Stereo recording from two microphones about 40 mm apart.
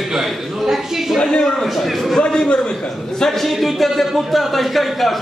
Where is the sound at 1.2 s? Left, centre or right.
Centre.